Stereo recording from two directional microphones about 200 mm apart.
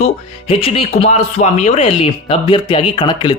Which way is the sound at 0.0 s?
30° left (ahead or behind).